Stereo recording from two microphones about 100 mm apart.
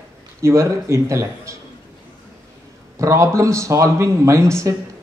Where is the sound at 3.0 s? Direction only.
35° right (ahead or behind).